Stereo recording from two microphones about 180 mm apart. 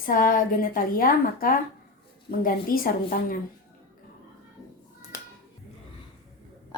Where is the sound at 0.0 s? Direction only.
50° left (ahead or behind).